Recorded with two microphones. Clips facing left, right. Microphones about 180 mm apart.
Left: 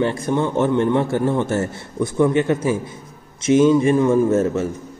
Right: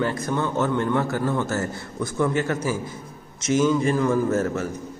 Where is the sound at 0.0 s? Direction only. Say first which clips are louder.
Left 5 dB; 25° left (ahead or behind).